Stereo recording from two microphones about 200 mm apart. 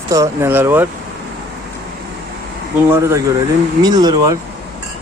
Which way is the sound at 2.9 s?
15° right (ahead or behind).